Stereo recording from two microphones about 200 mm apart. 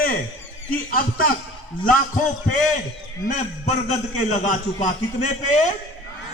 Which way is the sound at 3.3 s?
35° left (ahead or behind).